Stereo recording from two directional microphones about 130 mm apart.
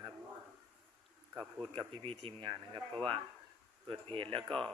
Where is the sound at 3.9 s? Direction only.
45° right (ahead or behind).